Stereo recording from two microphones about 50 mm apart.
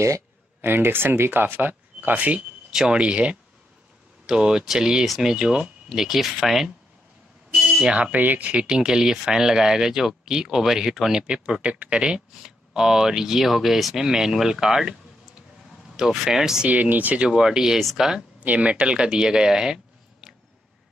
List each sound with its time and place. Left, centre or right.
0.6 s speech: right; by 6.7 s centre
7.5 s a sound: centre
8.0 s speech: right; by 15.0 s centre
16.0 s speech: centre
16.6 s speech: right
17.3 s speech: centre
18.4 s speech: right